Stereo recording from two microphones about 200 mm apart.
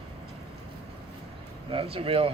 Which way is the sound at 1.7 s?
25° right (ahead or behind).